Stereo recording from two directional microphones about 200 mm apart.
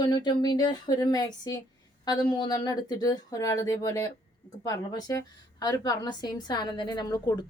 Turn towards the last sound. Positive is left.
turn(degrees=20)  # may be behind; listen again after turning